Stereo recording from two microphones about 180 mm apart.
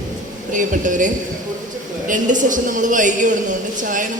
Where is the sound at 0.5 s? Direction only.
45° right (ahead or behind).